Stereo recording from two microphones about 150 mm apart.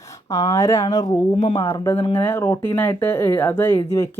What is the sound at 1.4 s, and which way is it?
Speech, 40° left (ahead or behind).